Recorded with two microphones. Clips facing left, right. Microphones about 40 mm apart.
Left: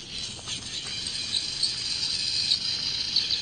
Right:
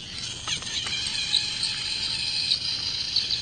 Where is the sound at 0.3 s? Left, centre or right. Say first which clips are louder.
Right 5 dB; right.